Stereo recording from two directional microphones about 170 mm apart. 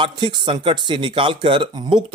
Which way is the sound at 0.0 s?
30° right (ahead or behind).